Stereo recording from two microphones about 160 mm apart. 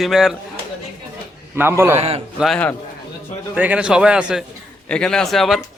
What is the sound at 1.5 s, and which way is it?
Speech, 15° right (ahead or behind).